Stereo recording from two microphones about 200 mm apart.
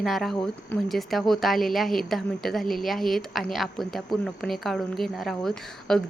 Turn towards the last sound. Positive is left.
turn(degrees=0)  # may be behind; listen again after turning